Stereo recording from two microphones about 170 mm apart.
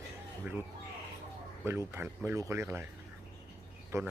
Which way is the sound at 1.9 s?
15° right (ahead or behind).